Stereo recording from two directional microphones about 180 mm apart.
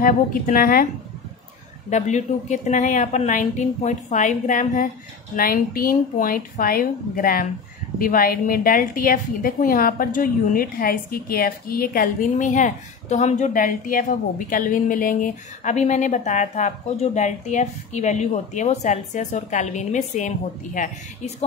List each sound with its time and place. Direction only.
0.0 s speech: 50° left (ahead or behind)
1.9 s speech: 40° left (ahead or behind)